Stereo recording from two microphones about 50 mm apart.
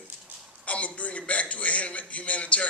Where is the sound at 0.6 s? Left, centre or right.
Left.